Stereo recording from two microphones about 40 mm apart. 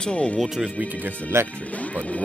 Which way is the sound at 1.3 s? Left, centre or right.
Right.